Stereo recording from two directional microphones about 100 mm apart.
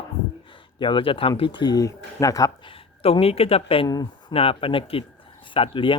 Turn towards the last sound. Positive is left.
turn(degrees=55)  # may be behind; listen again after turning